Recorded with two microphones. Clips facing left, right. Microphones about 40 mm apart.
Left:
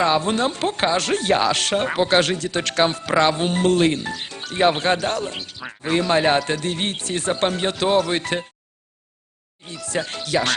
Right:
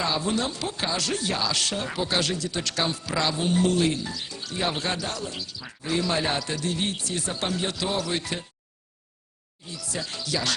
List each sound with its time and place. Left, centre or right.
0.0 s speech: left
9.6 s speech: left